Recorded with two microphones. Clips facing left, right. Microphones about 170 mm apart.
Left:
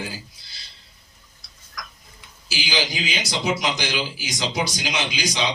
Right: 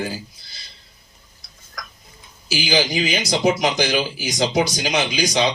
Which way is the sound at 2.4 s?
50° right (ahead or behind).